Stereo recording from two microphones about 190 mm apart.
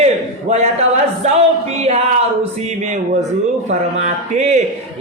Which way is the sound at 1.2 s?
35° right (ahead or behind).